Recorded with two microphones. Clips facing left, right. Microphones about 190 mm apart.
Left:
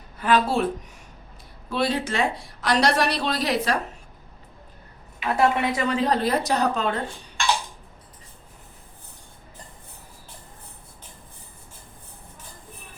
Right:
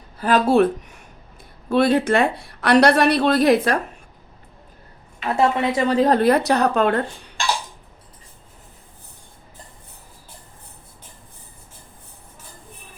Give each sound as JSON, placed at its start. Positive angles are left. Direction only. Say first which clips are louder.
{"t": 0.2, "sound": "speech", "louder": "right 5 dB", "side_deg": -45}
{"t": 1.7, "sound": "speech", "louder": "right 8 dB", "side_deg": -55}
{"t": 5.4, "sound": "a woman's voice", "louder": "right 3 dB", "side_deg": -25}
{"t": 6.0, "sound": "speech", "louder": "right 8 dB", "side_deg": -55}